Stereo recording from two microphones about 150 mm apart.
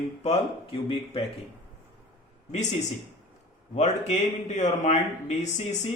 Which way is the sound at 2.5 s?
50° left (ahead or behind).